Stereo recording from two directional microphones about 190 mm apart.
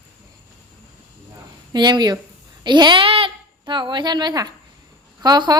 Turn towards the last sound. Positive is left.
turn(degrees=-20)  # may be behind; listen again after turning